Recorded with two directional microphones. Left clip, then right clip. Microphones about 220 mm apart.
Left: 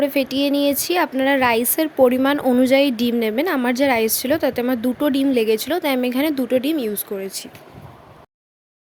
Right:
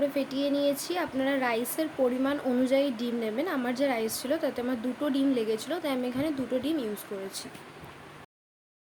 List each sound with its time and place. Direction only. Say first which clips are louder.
0.0 s speech: left 9 dB; 40° left (ahead or behind)